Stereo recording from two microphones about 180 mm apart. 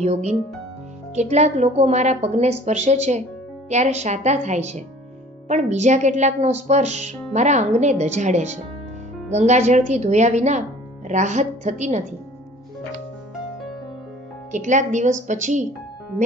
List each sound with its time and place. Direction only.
0.0 s a woman's voice: 35° right (ahead or behind)
14.5 s speech: 45° right (ahead or behind)